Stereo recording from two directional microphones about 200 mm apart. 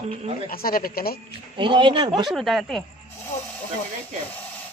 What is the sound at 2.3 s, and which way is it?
Speech, centre (ahead or behind).